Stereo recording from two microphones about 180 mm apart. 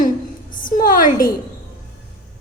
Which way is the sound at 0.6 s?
50° left (ahead or behind).